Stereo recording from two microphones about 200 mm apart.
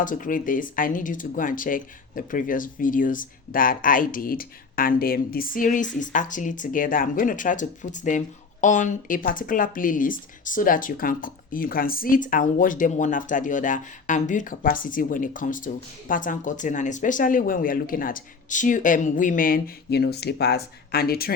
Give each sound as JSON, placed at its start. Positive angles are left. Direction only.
{"t": 0.0, "sound": "speech", "side_deg": 40}